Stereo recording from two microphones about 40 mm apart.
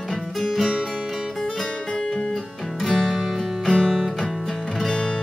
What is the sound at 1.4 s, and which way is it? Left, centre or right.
Music, centre.